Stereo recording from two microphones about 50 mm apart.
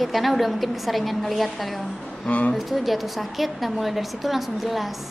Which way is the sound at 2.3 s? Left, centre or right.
Left.